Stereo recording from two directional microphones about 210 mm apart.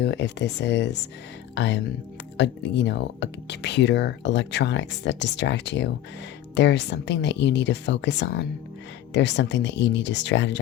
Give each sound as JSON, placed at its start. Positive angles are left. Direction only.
{"t": 0.0, "sound": "speech", "side_deg": 55}